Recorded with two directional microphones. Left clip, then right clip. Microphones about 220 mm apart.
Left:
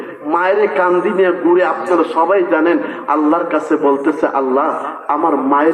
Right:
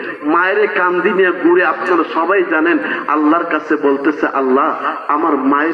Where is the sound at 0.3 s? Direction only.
50° left (ahead or behind).